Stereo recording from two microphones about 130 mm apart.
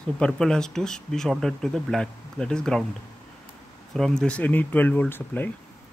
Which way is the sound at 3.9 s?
5° left (ahead or behind).